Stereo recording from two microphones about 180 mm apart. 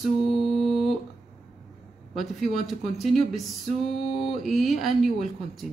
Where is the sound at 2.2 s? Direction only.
Centre (ahead or behind).